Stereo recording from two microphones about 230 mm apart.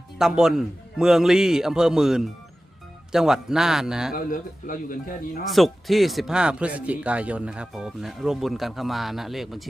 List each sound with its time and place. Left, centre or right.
0.2 s speech: centre
4.1 s a man's voice: left
5.5 s speech: centre